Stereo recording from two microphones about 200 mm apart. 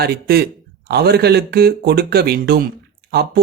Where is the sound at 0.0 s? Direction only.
50° right (ahead or behind).